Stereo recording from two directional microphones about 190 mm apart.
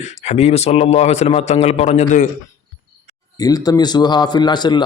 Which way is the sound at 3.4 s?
20° left (ahead or behind).